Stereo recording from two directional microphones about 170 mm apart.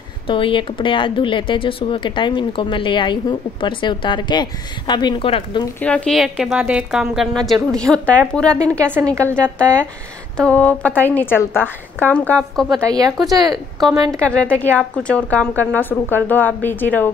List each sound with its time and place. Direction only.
0.3 s speech: 30° left (ahead or behind)
5.8 s a woman's voice: 5° left (ahead or behind)
8.9 s a woman's voice: 15° right (ahead or behind)
10.3 s speech: 5° left (ahead or behind)
12.8 s speech: 20° right (ahead or behind)
14.2 s speech: 5° left (ahead or behind)